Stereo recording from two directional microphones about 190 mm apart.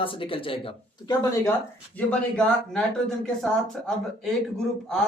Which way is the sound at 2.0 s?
5° left (ahead or behind).